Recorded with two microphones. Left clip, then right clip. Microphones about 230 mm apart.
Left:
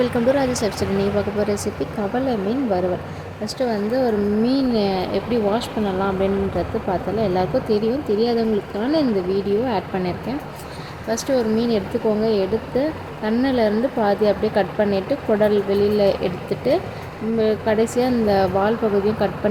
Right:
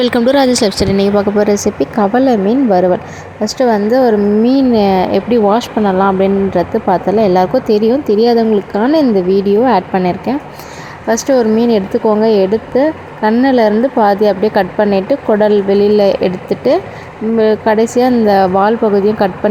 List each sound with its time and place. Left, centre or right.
0.0 s a woman's voice: right